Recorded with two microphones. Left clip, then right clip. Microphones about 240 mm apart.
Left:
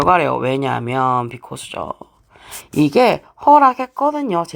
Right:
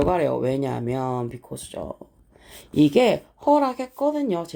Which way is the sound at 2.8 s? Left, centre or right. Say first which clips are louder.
Left 4 dB; left.